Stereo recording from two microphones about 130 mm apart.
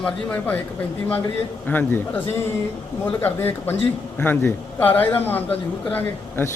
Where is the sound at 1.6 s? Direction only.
15° left (ahead or behind).